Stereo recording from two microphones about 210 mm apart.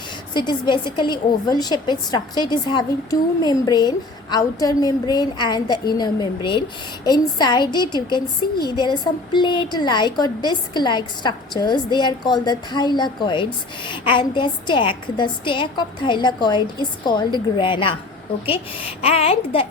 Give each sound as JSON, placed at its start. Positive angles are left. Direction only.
{"t": 0.3, "sound": "a woman's voice", "side_deg": 20}